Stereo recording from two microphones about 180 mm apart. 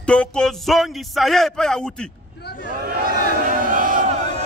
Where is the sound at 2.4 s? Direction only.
65° left (ahead or behind).